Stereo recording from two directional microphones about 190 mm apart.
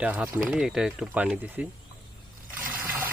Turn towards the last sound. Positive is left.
turn(degrees=-10)  # may be behind; listen again after turning